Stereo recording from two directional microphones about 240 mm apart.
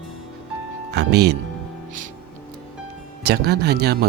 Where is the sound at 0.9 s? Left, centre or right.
Right.